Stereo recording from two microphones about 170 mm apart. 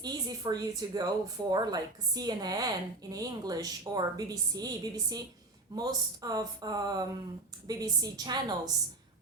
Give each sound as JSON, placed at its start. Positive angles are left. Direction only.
{"t": 0.0, "sound": "speech", "side_deg": -25}